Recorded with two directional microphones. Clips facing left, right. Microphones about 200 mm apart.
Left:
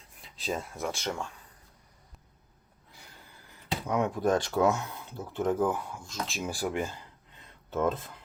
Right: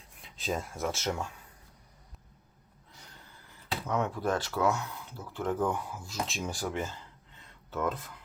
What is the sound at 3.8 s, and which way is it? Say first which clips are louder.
Speech: left 3 dB; 10° left (ahead or behind).